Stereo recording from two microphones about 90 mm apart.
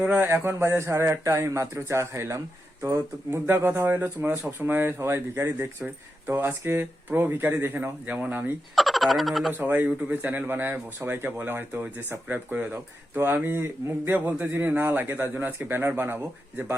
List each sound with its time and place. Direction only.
0.0 s speech: 20° right (ahead or behind)
8.7 s speech: centre (ahead or behind)
9.5 s speech: 20° right (ahead or behind)